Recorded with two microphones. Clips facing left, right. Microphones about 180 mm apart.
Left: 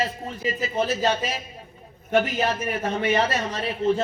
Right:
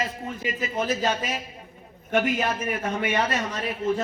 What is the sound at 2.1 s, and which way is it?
Speech, 30° left (ahead or behind).